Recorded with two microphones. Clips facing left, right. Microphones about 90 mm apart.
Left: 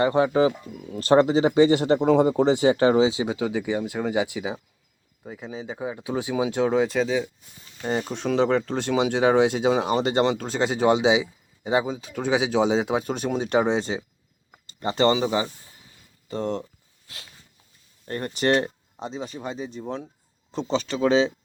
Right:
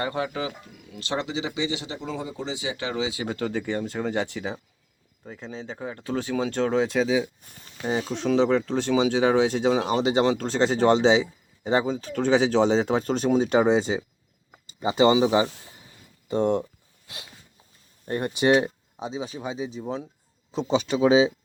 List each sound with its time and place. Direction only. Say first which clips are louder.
0.0 s speech: left 9 dB; 30° left (ahead or behind)
3.2 s speech: left 3 dB; 10° left (ahead or behind); by 16.6 s 20° right (ahead or behind)
18.0 s speech: right 2 dB; 15° right (ahead or behind)